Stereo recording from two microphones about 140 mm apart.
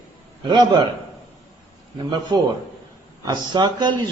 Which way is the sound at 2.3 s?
30° right (ahead or behind).